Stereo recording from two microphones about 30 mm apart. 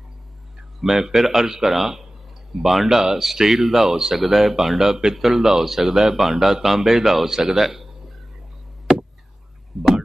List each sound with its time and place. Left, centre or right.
0.7 s speech: centre
7.2 s speech: centre
7.5 s speech: centre
9.7 s a sound: centre